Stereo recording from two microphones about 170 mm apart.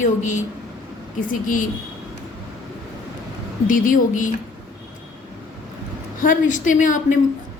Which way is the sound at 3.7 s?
50° left (ahead or behind).